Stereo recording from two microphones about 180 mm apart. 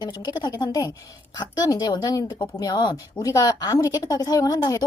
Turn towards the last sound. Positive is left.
turn(degrees=20)  # may be behind; listen again after turning